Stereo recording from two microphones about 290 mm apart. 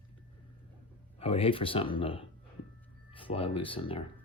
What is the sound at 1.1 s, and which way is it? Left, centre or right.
Speech, centre.